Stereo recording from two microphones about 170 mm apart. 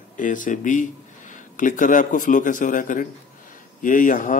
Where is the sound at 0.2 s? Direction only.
50° left (ahead or behind).